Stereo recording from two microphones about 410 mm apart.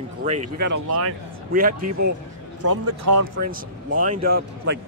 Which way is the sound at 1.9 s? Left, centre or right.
Right.